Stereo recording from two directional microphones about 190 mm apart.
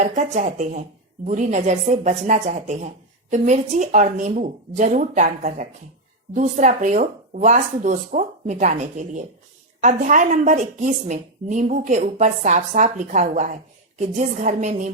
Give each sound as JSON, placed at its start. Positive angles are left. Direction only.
{"t": 0.0, "sound": "a woman's voice", "side_deg": -40}